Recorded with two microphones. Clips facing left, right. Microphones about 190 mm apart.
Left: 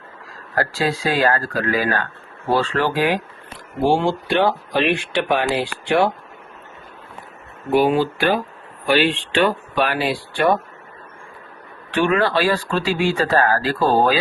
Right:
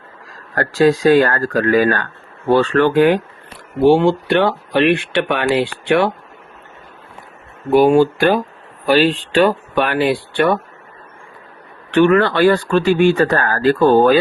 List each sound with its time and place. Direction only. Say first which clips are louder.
0.5 s speech: right 8 dB; 65° right (ahead or behind)
7.7 s speech: right 6 dB; 45° right (ahead or behind)
9.7 s speech: right 4 dB; 55° right (ahead or behind)
11.9 s speech: right 6 dB; 60° right (ahead or behind)